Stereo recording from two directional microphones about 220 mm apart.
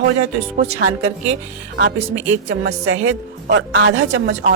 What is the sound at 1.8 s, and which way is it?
A woman's voice, 55° right (ahead or behind).